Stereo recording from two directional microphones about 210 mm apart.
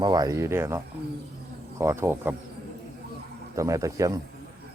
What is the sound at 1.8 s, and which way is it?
Speech, 10° right (ahead or behind).